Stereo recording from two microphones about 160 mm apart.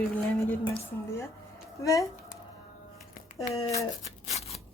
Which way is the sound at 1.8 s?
20° left (ahead or behind).